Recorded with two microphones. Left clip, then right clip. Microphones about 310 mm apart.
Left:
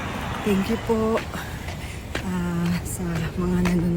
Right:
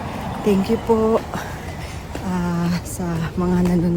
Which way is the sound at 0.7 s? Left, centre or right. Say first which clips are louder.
Right 6 dB; right.